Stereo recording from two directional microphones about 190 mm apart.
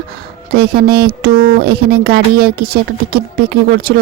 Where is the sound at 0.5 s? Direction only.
55° right (ahead or behind).